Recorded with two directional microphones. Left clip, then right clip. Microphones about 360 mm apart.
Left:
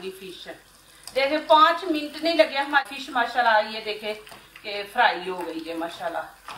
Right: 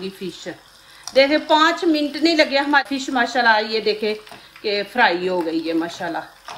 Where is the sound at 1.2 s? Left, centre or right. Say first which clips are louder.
Right 3 dB; right.